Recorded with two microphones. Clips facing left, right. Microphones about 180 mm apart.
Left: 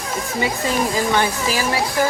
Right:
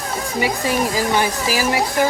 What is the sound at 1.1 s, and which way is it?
Speech, 15° right (ahead or behind).